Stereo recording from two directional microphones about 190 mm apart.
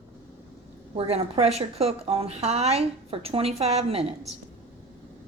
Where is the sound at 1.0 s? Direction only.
30° right (ahead or behind).